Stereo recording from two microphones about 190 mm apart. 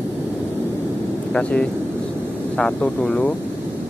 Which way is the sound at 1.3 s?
5° left (ahead or behind).